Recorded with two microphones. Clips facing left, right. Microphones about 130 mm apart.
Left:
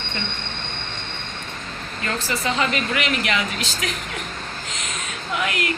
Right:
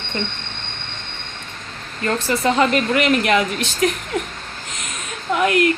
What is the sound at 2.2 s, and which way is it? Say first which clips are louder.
Speech: right 7 dB; 45° right (ahead or behind).